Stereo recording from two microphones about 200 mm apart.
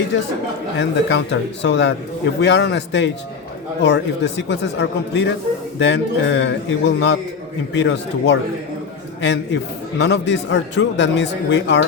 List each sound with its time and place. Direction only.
0.1 s speech: 60° left (ahead or behind)